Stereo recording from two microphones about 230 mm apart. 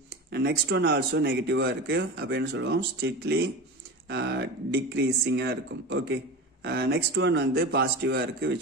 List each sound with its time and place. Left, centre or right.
0.3 s speech: right